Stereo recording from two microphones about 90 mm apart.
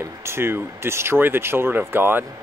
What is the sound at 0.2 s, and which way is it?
Speech, 30° right (ahead or behind).